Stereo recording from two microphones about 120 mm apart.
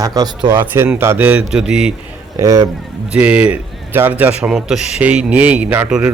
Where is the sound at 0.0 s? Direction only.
30° right (ahead or behind).